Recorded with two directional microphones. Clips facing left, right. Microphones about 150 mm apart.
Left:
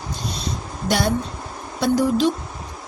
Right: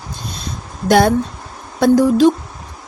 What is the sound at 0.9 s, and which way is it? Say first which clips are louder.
Speech: right 9 dB; 50° right (ahead or behind).